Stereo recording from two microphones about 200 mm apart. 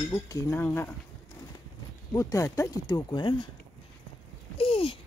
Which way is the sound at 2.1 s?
15° left (ahead or behind).